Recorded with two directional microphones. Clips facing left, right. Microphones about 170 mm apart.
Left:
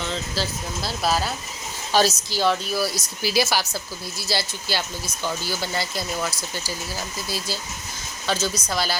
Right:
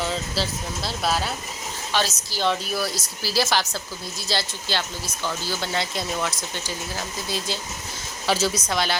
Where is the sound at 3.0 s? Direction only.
15° left (ahead or behind).